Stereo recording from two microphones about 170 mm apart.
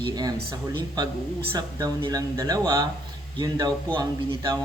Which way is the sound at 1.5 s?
20° right (ahead or behind).